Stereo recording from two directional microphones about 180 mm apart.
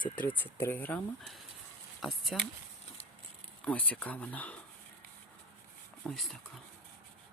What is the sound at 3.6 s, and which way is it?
Speech, 10° left (ahead or behind).